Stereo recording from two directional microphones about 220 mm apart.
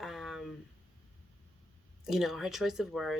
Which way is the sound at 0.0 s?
Centre (ahead or behind).